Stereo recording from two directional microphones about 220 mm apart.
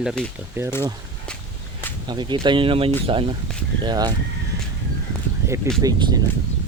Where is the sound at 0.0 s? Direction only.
Centre (ahead or behind).